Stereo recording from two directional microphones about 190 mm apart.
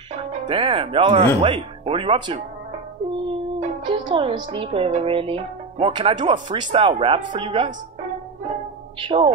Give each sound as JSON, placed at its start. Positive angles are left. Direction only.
{"t": 0.1, "sound": "speech", "side_deg": -35}
{"t": 3.5, "sound": "music", "side_deg": -35}
{"t": 4.0, "sound": "a woman's voice", "side_deg": -25}
{"t": 9.0, "sound": "speech", "side_deg": -25}